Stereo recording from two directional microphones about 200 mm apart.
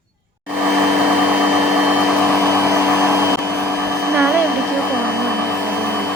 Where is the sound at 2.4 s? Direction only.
15° right (ahead or behind).